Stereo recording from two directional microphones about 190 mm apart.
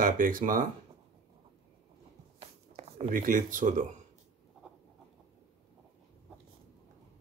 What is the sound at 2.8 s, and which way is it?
Speech, 45° right (ahead or behind).